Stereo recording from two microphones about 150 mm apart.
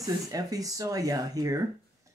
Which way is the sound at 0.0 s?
25° right (ahead or behind).